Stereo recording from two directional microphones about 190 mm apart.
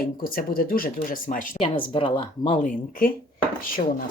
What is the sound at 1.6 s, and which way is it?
Speech, 25° left (ahead or behind).